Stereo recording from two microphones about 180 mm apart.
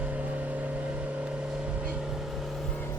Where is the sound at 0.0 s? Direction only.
10° right (ahead or behind).